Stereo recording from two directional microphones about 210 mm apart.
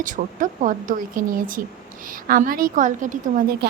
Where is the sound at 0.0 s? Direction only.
40° right (ahead or behind).